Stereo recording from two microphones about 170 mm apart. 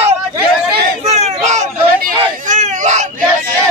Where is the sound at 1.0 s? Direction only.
40° right (ahead or behind).